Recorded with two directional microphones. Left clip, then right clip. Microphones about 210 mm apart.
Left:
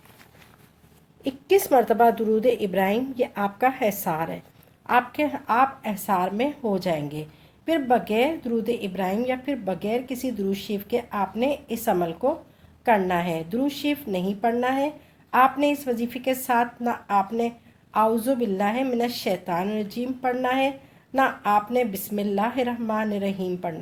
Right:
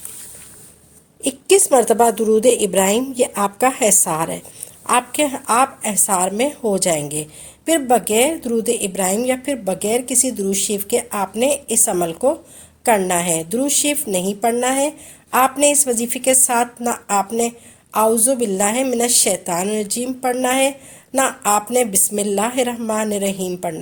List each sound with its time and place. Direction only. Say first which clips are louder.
1.2 s a woman's voice: right 6 dB; 40° right (ahead or behind)